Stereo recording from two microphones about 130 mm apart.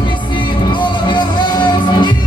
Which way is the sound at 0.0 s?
35° left (ahead or behind).